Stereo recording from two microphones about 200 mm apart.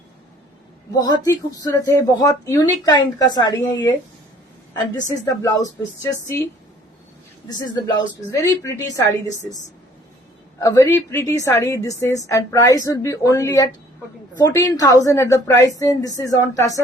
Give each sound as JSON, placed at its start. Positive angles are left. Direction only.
{"t": 0.9, "sound": "a woman's voice", "side_deg": 20}
{"t": 5.0, "sound": "a woman's voice", "side_deg": 15}
{"t": 7.5, "sound": "a woman's voice", "side_deg": 20}
{"t": 10.6, "sound": "a woman's voice", "side_deg": 15}